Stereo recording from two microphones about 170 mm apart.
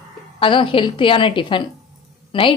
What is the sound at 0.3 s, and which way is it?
A woman's voice, 30° left (ahead or behind).